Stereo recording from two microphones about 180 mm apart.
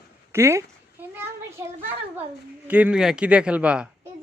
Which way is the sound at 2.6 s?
10° right (ahead or behind).